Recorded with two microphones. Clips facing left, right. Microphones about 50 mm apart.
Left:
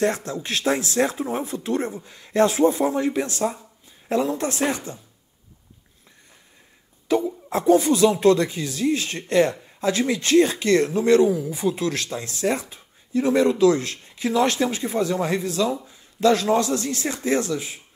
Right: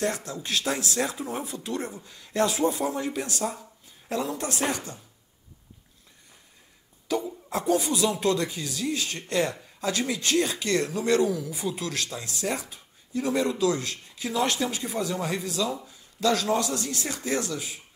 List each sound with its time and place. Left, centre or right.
0.0 s speech: left
7.1 s a sound: left
7.4 s speech: left